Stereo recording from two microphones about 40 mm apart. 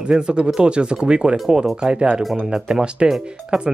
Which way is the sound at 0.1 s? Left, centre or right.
Right.